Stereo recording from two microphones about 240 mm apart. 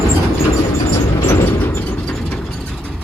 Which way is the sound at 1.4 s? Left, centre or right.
Centre.